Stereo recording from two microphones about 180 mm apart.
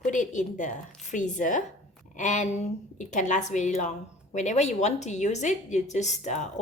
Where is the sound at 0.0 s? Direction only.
45° left (ahead or behind).